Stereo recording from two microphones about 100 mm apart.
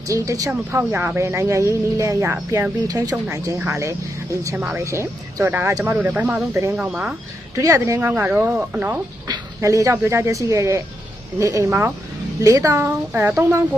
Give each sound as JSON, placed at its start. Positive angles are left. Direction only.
{"t": 0.1, "sound": "speech", "side_deg": -35}
{"t": 0.8, "sound": "speech", "side_deg": -20}
{"t": 4.5, "sound": "speech", "side_deg": -15}
{"t": 4.8, "sound": "speech", "side_deg": -25}
{"t": 7.6, "sound": "speech", "side_deg": -35}
{"t": 8.0, "sound": "speech", "side_deg": -15}
{"t": 9.2, "sound": "speech", "side_deg": -35}
{"t": 12.7, "sound": "speech", "side_deg": -20}